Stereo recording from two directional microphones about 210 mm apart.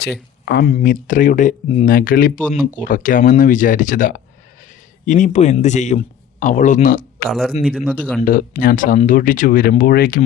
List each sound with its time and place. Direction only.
0.6 s a man's voice: 40° left (ahead or behind)
7.3 s speech: centre (ahead or behind)
8.2 s speech: 45° left (ahead or behind)